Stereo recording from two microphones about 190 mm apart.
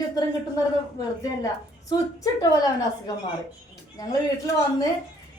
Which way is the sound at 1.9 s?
20° left (ahead or behind).